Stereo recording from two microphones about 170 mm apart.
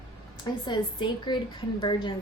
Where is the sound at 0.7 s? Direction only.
25° left (ahead or behind).